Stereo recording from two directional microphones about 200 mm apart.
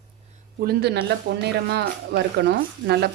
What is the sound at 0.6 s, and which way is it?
Speech, 50° right (ahead or behind).